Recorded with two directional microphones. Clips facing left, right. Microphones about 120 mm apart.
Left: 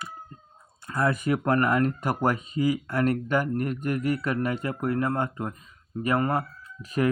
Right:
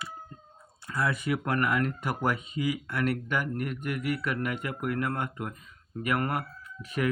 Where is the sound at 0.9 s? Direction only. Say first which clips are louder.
Left 4 dB; 45° left (ahead or behind).